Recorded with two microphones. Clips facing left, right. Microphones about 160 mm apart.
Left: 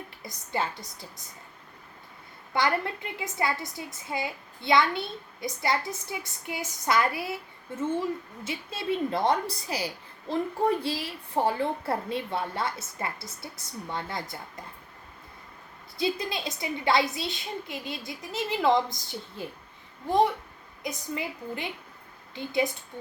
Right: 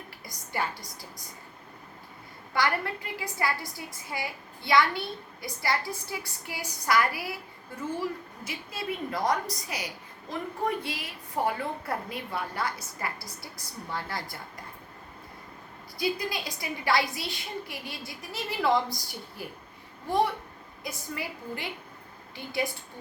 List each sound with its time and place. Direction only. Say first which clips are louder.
0.2 s a woman's voice: left 2 dB; 25° left (ahead or behind)
2.5 s a woman's voice: left 1 dB; 20° left (ahead or behind)
16.0 s a woman's voice: left 1 dB; 25° left (ahead or behind)